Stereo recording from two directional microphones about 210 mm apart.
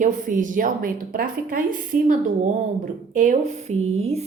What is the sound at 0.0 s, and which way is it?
A woman's voice, 40° right (ahead or behind).